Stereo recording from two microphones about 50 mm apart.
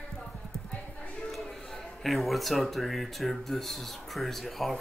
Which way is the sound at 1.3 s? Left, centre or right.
Centre.